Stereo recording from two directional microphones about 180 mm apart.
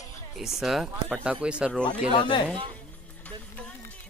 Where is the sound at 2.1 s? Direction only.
25° left (ahead or behind).